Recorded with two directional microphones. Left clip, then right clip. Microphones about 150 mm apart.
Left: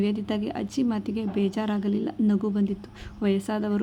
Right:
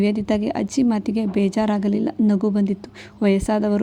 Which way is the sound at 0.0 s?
40° right (ahead or behind).